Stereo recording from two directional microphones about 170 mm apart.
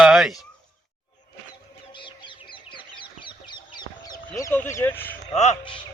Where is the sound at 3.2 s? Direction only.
25° left (ahead or behind).